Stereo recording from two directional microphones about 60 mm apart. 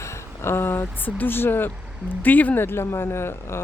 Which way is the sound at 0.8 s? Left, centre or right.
Left.